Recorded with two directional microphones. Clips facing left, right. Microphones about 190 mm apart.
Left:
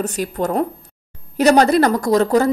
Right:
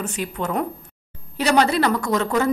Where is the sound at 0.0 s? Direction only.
40° left (ahead or behind).